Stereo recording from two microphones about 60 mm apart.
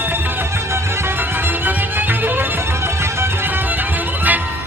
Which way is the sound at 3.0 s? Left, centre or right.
Right.